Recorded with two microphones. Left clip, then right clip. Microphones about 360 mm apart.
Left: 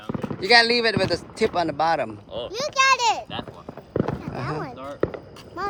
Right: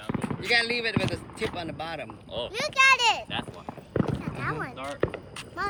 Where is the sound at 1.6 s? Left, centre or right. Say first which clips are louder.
Left 13 dB; left.